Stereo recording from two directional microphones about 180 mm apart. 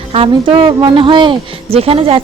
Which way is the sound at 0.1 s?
30° right (ahead or behind).